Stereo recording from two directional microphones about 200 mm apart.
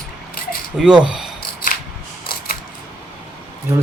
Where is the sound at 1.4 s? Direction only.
50° left (ahead or behind).